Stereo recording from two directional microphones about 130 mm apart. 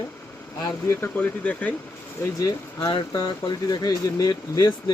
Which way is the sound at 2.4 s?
25° left (ahead or behind).